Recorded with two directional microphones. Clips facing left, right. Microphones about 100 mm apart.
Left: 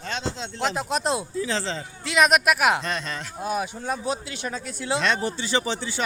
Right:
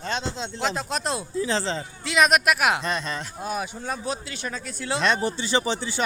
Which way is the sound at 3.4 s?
5° left (ahead or behind).